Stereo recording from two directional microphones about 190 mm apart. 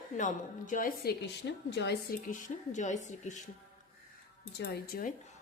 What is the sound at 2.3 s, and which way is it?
A woman's voice, 40° left (ahead or behind).